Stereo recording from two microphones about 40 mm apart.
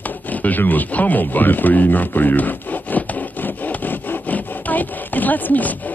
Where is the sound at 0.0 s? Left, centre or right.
Left.